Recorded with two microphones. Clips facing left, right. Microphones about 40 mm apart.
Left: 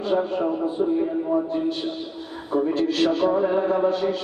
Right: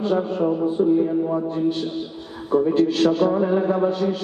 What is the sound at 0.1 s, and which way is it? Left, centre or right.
Music, centre.